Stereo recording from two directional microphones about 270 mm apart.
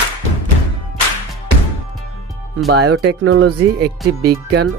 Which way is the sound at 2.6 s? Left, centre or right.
Right.